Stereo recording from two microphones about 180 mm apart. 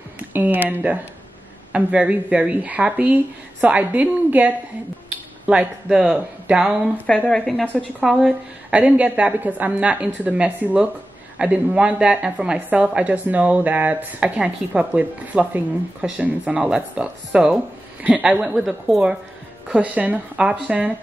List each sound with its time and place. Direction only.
0.3 s a woman's voice: 10° right (ahead or behind)